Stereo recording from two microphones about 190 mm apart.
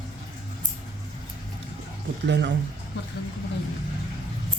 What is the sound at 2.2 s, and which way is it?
Speech, 65° right (ahead or behind).